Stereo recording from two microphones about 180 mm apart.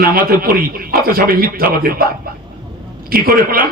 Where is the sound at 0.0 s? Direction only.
55° right (ahead or behind).